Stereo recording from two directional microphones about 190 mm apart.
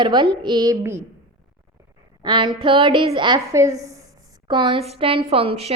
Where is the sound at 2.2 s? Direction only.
25° right (ahead or behind).